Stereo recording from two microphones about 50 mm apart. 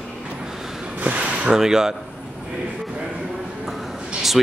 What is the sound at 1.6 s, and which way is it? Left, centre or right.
Speech, centre.